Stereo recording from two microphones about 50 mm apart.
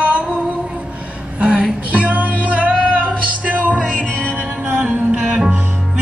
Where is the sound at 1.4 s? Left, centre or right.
Right.